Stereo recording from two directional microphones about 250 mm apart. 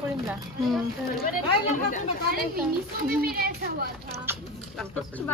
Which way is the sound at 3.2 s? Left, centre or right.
Right.